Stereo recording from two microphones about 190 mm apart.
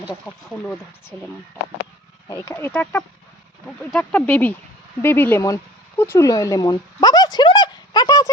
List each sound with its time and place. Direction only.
0.3 s speech: 5° left (ahead or behind)
2.2 s speech: 15° left (ahead or behind)